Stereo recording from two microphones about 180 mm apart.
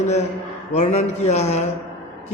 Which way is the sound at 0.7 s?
40° left (ahead or behind).